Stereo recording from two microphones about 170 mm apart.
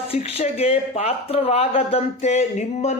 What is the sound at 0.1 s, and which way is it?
Speech, 35° left (ahead or behind).